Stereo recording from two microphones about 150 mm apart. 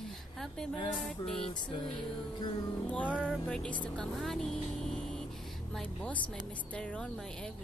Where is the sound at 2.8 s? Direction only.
10° left (ahead or behind).